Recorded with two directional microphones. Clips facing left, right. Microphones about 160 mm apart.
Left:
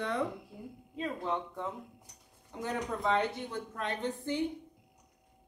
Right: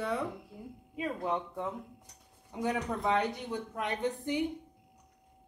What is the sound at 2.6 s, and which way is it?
A woman's voice, 15° right (ahead or behind).